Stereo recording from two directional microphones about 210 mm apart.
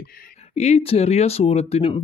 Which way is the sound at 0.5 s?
30° left (ahead or behind).